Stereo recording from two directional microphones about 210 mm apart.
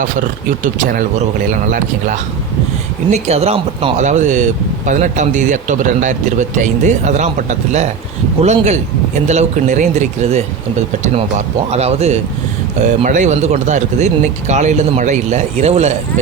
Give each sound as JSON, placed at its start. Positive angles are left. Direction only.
{"t": 0.2, "sound": "speech", "side_deg": -40}
{"t": 3.1, "sound": "speech", "side_deg": -30}